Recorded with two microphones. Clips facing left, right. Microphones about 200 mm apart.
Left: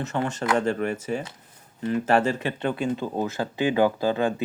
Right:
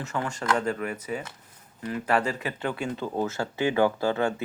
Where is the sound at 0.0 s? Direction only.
25° left (ahead or behind).